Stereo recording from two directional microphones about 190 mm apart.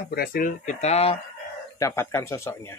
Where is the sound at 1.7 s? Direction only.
15° left (ahead or behind).